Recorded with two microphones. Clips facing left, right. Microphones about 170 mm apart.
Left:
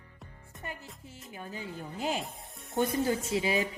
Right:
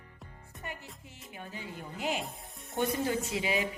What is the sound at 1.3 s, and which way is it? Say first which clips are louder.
Speech: left 2 dB; 30° left (ahead or behind).